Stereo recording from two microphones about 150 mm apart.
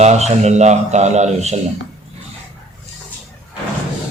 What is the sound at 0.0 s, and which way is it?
A man's voice, 45° right (ahead or behind).